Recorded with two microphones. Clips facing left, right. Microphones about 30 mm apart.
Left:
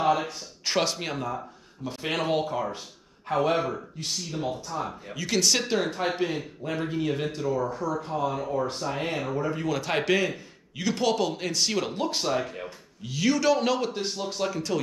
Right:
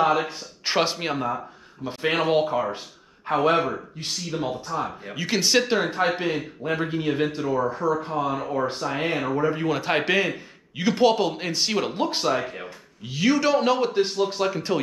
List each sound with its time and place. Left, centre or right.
0.0 s a man's voice: right